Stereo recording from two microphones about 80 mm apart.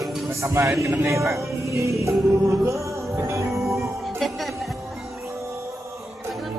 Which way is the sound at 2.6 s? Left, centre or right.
Right.